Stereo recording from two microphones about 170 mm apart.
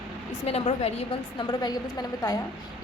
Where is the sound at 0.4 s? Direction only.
35° left (ahead or behind).